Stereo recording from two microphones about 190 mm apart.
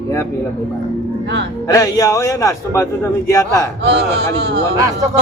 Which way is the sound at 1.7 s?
20° left (ahead or behind).